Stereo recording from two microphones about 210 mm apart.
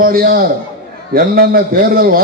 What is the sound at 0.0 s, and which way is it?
A man's voice, 45° right (ahead or behind).